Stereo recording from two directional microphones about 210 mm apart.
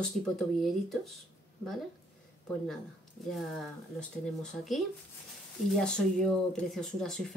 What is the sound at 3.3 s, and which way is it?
Speech, centre (ahead or behind).